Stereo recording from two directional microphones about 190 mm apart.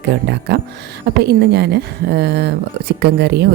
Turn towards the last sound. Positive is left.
turn(degrees=-60)  # may be behind; listen again after turning